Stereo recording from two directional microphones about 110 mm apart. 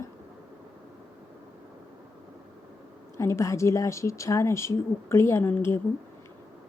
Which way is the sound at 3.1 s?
25° left (ahead or behind).